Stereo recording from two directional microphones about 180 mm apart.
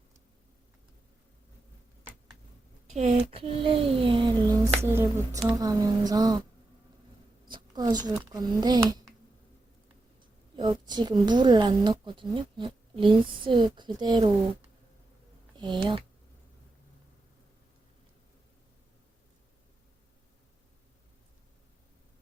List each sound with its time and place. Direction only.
2.9 s a woman's voice: 35° right (ahead or behind)
7.4 s speech: 25° right (ahead or behind)
10.5 s a woman's voice: 25° right (ahead or behind)
15.5 s a woman's voice: 25° right (ahead or behind)